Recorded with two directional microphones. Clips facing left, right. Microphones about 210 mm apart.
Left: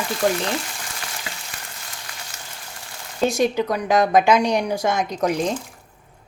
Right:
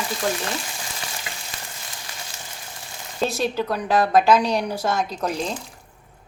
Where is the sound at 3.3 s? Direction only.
15° left (ahead or behind).